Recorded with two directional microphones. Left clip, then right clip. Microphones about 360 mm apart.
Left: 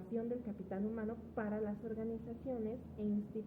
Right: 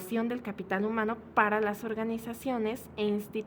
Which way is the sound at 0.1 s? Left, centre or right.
Right.